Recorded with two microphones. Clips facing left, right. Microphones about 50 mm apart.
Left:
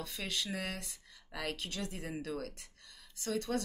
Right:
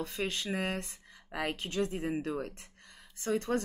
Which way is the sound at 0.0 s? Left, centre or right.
Right.